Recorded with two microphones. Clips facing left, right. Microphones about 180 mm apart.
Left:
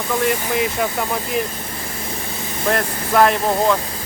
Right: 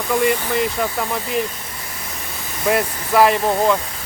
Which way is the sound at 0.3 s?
5° left (ahead or behind).